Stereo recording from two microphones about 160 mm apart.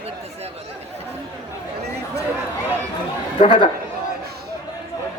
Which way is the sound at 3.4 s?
35° left (ahead or behind).